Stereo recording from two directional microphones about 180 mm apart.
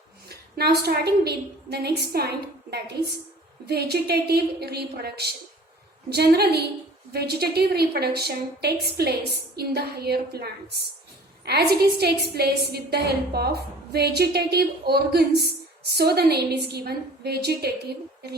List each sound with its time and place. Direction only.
0.3 s a woman's voice: 60° right (ahead or behind)